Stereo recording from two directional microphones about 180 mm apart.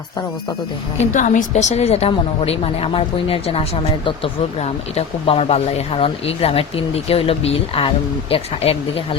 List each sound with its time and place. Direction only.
1.1 s a woman's voice: 45° left (ahead or behind)